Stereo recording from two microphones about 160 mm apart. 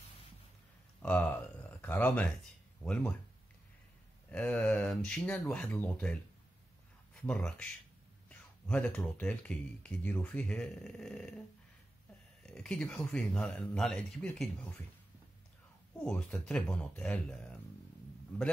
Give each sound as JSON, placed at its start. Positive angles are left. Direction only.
{"t": 1.0, "sound": "speech", "side_deg": 10}
{"t": 4.3, "sound": "speech", "side_deg": 10}
{"t": 7.2, "sound": "speech", "side_deg": 5}
{"t": 12.4, "sound": "speech", "side_deg": 5}
{"t": 16.0, "sound": "speech", "side_deg": 5}